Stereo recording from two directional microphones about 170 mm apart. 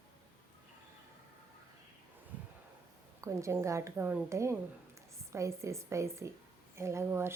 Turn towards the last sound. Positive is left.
turn(degrees=-15)  # may be behind; listen again after turning